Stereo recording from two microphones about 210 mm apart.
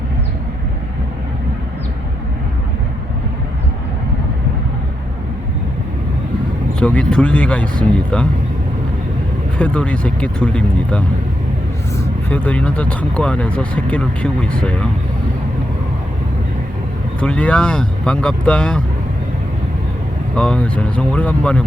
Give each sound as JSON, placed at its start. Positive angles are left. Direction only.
{"t": 6.7, "sound": "speech", "side_deg": 5}
{"t": 9.6, "sound": "speech", "side_deg": 5}
{"t": 12.3, "sound": "speech", "side_deg": 10}
{"t": 17.2, "sound": "speech", "side_deg": 5}
{"t": 20.3, "sound": "speech", "side_deg": 5}